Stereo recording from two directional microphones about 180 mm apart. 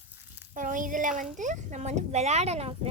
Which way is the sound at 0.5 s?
45° right (ahead or behind).